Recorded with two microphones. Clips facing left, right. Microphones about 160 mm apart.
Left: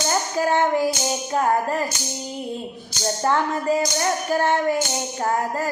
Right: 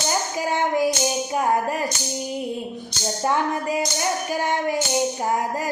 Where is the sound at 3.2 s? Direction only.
15° right (ahead or behind).